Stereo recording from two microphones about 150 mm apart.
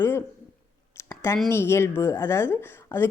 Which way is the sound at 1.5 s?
15° left (ahead or behind).